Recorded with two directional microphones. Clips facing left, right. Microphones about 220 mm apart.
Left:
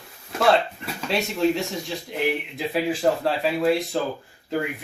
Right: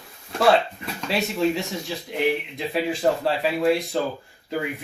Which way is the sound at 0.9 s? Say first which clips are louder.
Even; centre (ahead or behind).